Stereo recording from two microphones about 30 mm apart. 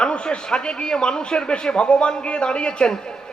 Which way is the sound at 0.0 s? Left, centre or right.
Left.